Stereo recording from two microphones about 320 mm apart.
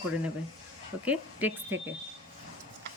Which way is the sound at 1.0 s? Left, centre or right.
Centre.